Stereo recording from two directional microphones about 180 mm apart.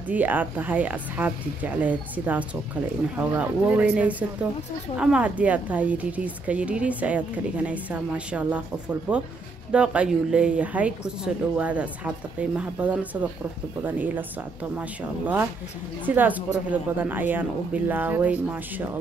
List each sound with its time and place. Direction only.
0.1 s speech: 10° right (ahead or behind)